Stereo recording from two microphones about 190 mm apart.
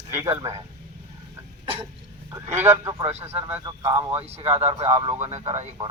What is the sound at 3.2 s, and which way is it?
Speech, 35° right (ahead or behind).